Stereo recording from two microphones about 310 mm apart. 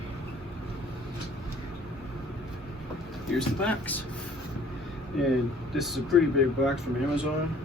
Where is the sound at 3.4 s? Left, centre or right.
Centre.